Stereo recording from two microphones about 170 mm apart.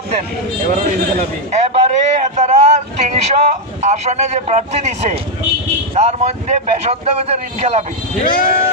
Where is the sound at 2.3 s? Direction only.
45° right (ahead or behind).